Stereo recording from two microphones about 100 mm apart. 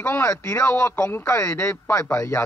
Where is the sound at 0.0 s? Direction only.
30° left (ahead or behind).